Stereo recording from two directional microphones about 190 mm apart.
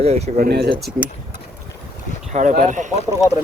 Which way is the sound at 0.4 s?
55° right (ahead or behind).